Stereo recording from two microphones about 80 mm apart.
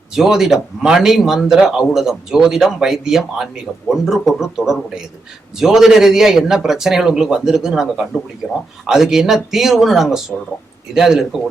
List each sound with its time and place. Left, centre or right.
0.2 s speech: centre